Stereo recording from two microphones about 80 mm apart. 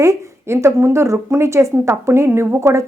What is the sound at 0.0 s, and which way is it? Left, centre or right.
A woman's voice, right.